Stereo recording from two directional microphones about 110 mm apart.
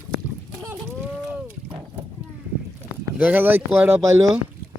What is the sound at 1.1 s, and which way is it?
Rowboat, 5° right (ahead or behind).